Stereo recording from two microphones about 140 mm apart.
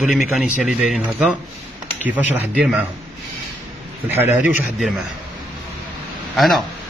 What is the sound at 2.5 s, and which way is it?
Speech, 10° right (ahead or behind).